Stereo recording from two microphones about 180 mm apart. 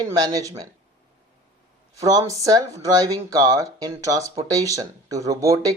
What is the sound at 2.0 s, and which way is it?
Speech, 20° right (ahead or behind).